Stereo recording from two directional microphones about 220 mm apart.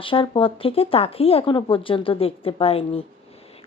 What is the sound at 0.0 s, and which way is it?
A woman's voice, 25° left (ahead or behind).